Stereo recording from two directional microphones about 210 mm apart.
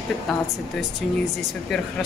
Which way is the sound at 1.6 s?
Centre (ahead or behind).